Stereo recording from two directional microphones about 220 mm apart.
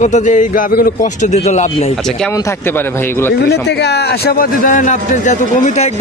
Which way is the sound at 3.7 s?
50° left (ahead or behind).